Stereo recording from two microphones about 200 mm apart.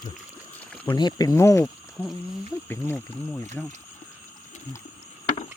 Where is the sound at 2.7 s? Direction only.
10° left (ahead or behind).